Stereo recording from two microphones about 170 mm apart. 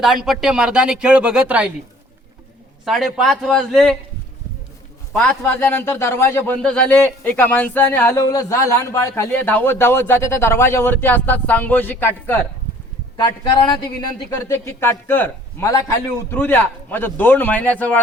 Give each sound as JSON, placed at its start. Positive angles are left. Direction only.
{"t": 0.0, "sound": "speech", "side_deg": 0}
{"t": 2.8, "sound": "speech", "side_deg": 0}
{"t": 5.4, "sound": "speech", "side_deg": 10}
{"t": 13.1, "sound": "speech", "side_deg": 25}